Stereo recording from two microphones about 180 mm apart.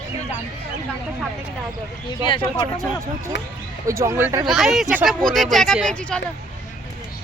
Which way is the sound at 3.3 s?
75° left (ahead or behind).